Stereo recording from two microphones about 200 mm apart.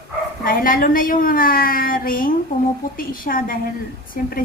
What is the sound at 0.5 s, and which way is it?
A woman's voice, 45° left (ahead or behind).